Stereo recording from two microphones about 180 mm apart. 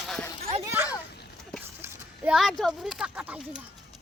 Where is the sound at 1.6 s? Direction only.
10° right (ahead or behind).